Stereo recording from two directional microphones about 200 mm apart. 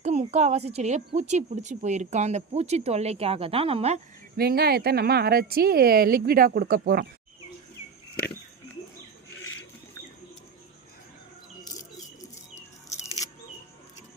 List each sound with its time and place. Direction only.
0.0 s a woman's voice: 35° right (ahead or behind)
4.4 s speech: 50° right (ahead or behind)
12.5 s a sound: 35° left (ahead or behind)